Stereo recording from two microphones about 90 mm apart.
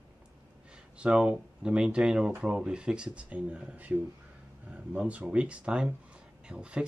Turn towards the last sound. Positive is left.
turn(degrees=-10)  # may be behind; listen again after turning